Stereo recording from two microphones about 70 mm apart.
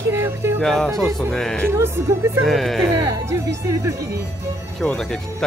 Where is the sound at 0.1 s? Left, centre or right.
Right.